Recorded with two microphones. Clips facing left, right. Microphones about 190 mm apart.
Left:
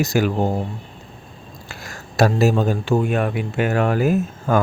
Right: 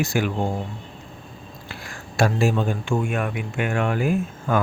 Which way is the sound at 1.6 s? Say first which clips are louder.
Left 1 dB; 40° left (ahead or behind).